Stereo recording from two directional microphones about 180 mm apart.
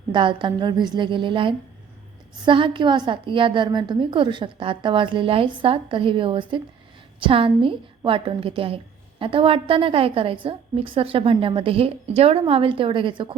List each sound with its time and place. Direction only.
0.1 s a woman's voice: 25° right (ahead or behind)